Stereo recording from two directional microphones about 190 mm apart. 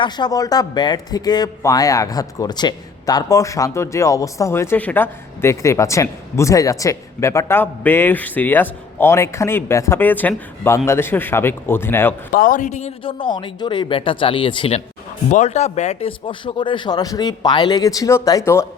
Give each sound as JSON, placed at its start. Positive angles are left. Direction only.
{"t": 0.0, "sound": "speech", "side_deg": 20}
{"t": 12.3, "sound": "a man's voice", "side_deg": 45}
{"t": 15.3, "sound": "a man's voice", "side_deg": 35}